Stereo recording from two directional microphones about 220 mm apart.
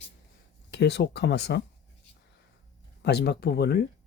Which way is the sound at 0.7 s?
50° left (ahead or behind).